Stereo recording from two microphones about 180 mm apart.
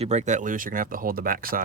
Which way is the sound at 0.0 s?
40° right (ahead or behind).